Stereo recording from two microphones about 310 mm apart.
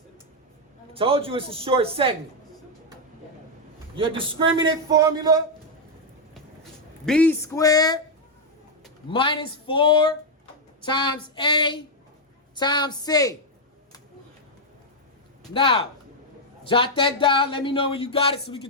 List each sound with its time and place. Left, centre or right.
0.9 s a man's voice: centre
4.2 s a man's voice: centre
7.0 s speech: centre
9.0 s speech: centre
15.5 s speech: centre